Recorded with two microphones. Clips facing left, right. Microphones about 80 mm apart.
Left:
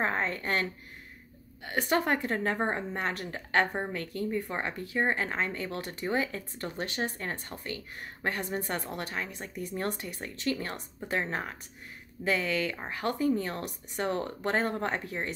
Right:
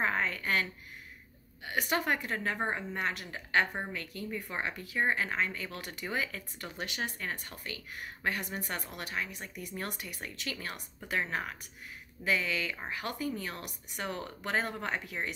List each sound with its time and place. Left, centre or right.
0.0 s speech: left